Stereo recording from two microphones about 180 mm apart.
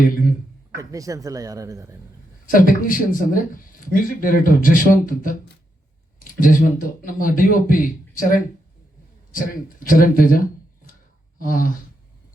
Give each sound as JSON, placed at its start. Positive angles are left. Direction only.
{"t": 0.8, "sound": "speech", "side_deg": -20}
{"t": 2.5, "sound": "speech", "side_deg": 50}